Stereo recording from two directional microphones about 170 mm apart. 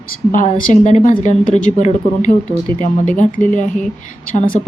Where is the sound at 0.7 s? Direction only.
45° left (ahead or behind).